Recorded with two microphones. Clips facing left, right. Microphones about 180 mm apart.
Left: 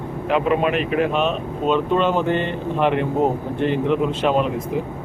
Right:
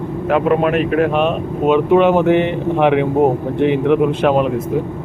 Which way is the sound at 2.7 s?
70° right (ahead or behind).